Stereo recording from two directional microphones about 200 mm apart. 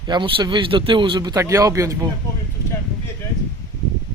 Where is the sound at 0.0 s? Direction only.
25° right (ahead or behind).